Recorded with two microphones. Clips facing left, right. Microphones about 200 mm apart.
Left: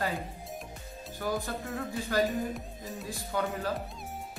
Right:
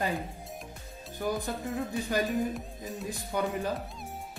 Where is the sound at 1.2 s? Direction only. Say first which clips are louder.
Right 1 dB; 20° right (ahead or behind).